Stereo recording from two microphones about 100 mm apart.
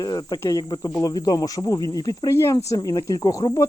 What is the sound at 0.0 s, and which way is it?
Speech, 40° left (ahead or behind).